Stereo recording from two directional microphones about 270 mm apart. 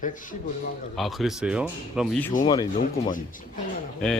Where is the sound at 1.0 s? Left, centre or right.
Centre.